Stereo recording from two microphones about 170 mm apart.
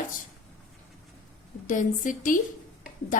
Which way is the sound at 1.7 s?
50° left (ahead or behind).